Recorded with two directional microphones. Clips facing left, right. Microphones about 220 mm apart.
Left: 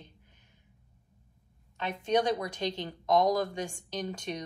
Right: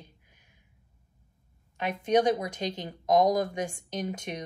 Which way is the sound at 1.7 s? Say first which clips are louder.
Right 3 dB; 15° right (ahead or behind).